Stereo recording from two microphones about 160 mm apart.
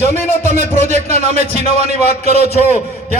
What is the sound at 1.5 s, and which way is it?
Speech, 75° left (ahead or behind).